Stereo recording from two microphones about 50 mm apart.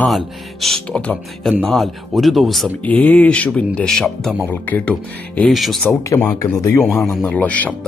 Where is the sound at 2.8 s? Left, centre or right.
Left.